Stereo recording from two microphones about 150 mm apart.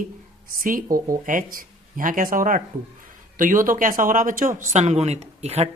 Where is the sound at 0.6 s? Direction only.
65° right (ahead or behind).